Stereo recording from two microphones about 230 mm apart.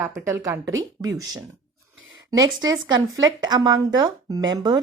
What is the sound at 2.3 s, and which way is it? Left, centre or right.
Speech, centre.